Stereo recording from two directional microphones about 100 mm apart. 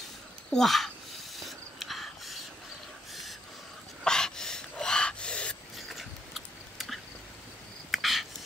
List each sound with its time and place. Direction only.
0.5 s a sound: centre (ahead or behind)
4.0 s gasp: 5° left (ahead or behind)
5.9 s biting: centre (ahead or behind)
7.9 s cricket: centre (ahead or behind)